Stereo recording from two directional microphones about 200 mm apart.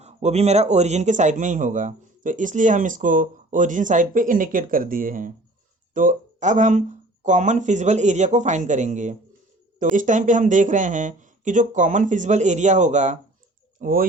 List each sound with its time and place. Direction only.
0.0 s speech: 35° right (ahead or behind)